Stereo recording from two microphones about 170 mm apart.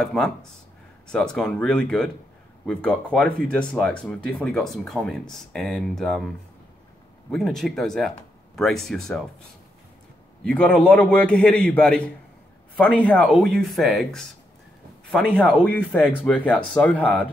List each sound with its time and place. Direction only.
0.0 s speech: 5° left (ahead or behind)
10.4 s speech: 5° left (ahead or behind)